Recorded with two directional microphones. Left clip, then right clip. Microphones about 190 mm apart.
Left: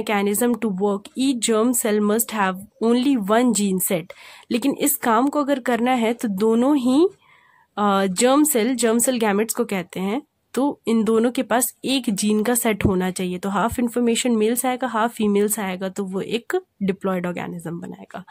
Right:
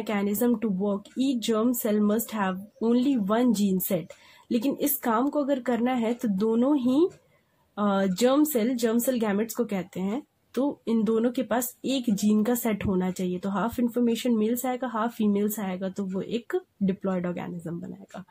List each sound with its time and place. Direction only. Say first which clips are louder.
0.0 s speech: left 6 dB; 30° left (ahead or behind)